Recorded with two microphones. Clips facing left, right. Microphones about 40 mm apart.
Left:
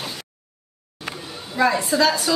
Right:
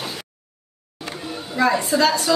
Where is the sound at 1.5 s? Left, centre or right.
Centre.